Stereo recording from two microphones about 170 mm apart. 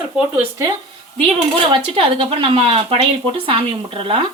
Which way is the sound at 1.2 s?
30° right (ahead or behind).